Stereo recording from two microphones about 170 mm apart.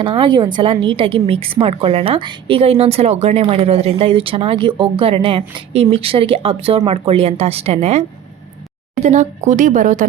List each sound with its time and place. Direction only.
0.0 s a woman's voice: 30° right (ahead or behind); by 10.1 s 50° right (ahead or behind)